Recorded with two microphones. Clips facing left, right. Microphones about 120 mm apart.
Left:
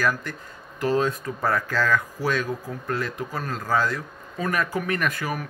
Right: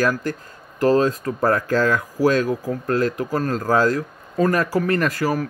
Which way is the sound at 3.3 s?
45° right (ahead or behind).